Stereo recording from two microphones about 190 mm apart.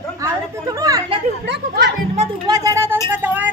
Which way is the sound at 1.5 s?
65° right (ahead or behind).